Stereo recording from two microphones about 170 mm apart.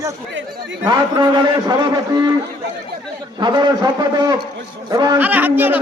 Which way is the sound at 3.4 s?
25° right (ahead or behind).